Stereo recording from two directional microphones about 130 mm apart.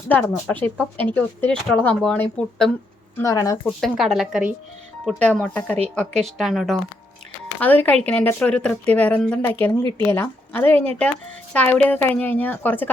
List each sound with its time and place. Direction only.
0.1 s a woman's voice: 10° left (ahead or behind)
3.2 s speech: 25° left (ahead or behind)
3.8 s speech: centre (ahead or behind)
5.0 s a woman's voice: 10° left (ahead or behind)
7.6 s a woman's voice: 10° left (ahead or behind)